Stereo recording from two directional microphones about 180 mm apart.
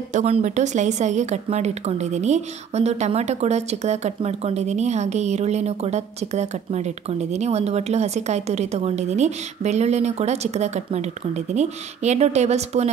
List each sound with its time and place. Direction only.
0.1 s a woman's voice: 40° right (ahead or behind)